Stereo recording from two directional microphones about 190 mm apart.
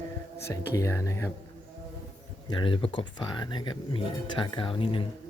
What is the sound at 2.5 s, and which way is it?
Speech, 25° left (ahead or behind).